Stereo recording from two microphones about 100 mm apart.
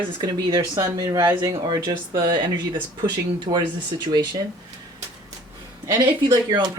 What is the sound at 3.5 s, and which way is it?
Speech, 90° right.